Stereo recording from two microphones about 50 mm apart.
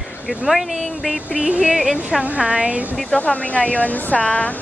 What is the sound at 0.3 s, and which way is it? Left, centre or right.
A woman's voice, centre.